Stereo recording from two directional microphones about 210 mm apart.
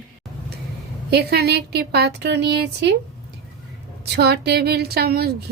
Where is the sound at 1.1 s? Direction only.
50° right (ahead or behind).